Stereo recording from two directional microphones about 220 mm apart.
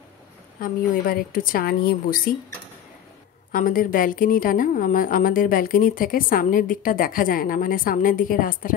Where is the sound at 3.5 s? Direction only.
40° left (ahead or behind).